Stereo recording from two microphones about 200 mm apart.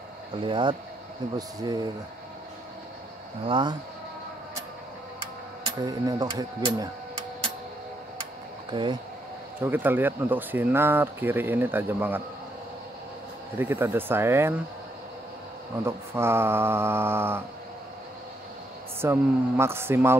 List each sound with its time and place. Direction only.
0.4 s speech: 25° right (ahead or behind)
3.4 s speech: 25° right (ahead or behind)
5.9 s speech: 20° right (ahead or behind)
9.6 s speech: 10° right (ahead or behind)
13.6 s speech: 10° right (ahead or behind)
15.8 s speech: 10° right (ahead or behind)
18.9 s speech: 10° right (ahead or behind)